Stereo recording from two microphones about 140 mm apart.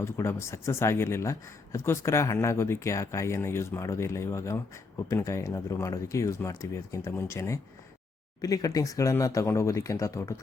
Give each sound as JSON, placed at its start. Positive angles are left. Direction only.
{"t": 0.0, "sound": "speech", "side_deg": 20}